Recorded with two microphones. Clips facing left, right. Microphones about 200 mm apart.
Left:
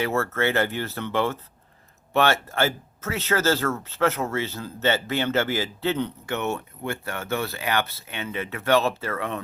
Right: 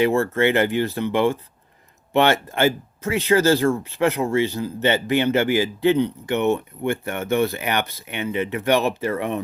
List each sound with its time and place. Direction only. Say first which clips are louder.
0.0 s speech: right 6 dB; 15° right (ahead or behind)